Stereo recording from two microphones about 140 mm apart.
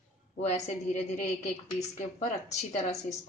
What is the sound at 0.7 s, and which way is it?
A woman's voice, 60° left (ahead or behind).